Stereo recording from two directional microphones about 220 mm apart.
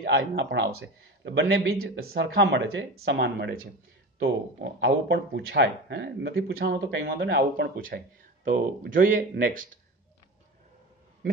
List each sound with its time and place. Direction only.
0.0 s speech: 50° right (ahead or behind)